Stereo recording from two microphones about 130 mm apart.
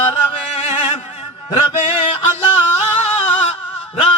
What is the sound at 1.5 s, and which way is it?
Music, 40° left (ahead or behind).